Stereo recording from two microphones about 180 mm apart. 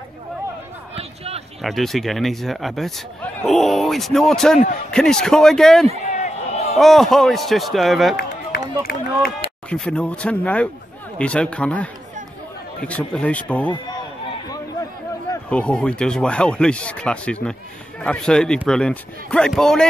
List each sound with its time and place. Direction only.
0.9 s a sound: 35° right (ahead or behind)
1.6 s a man's voice: centre (ahead or behind)
6.0 s a sound: 40° left (ahead or behind)
6.8 s a man's voice: centre (ahead or behind)
8.2 s run: 60° left (ahead or behind)
9.7 s speech: 5° left (ahead or behind)
15.5 s a man's voice: 5° left (ahead or behind)